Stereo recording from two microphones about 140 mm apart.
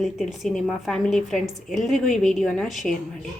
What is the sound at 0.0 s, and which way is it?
A woman's voice, centre (ahead or behind).